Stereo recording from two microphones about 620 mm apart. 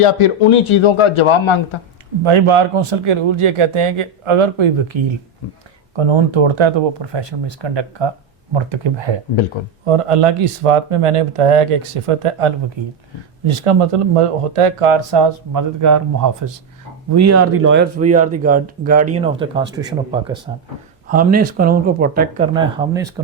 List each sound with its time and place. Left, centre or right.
0.0 s speech: left
2.2 s a man's voice: right
15.8 s a man's voice: right; by 23.2 s centre